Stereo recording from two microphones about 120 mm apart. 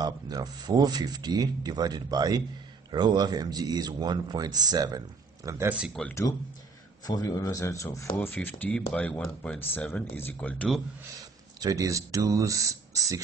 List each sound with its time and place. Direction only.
0.0 s speech: 35° right (ahead or behind)
6.0 s speech: 5° left (ahead or behind)
7.1 s speech: 30° left (ahead or behind)
11.6 s speech: 30° right (ahead or behind)